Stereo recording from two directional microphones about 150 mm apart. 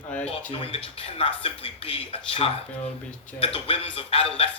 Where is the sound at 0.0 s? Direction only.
10° left (ahead or behind).